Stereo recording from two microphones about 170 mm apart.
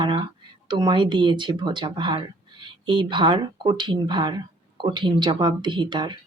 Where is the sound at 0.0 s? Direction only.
25° right (ahead or behind).